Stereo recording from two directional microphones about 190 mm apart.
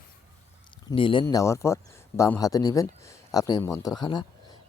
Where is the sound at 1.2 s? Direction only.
15° left (ahead or behind).